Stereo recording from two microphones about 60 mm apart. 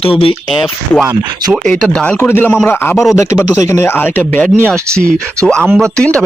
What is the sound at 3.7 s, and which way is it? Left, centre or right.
Speech, left.